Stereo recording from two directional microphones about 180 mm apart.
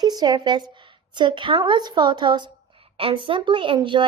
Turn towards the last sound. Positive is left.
turn(degrees=-25)  # may be behind; listen again after turning